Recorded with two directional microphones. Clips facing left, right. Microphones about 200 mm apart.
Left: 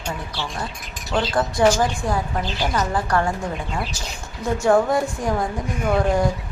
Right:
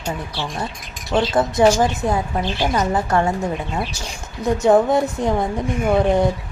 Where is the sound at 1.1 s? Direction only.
20° right (ahead or behind).